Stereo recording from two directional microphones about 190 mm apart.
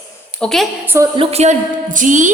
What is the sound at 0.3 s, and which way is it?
Speech, centre (ahead or behind).